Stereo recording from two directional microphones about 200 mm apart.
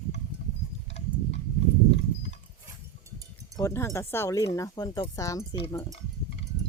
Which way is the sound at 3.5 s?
15° left (ahead or behind).